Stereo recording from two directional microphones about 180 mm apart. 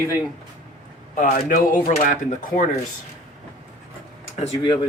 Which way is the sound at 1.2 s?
45° left (ahead or behind).